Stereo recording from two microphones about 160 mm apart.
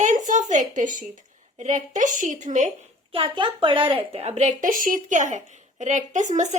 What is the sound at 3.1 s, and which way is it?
A woman's voice, 35° right (ahead or behind).